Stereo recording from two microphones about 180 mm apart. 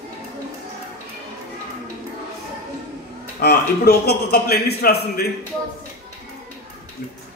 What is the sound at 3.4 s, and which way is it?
A man's voice, 60° left (ahead or behind).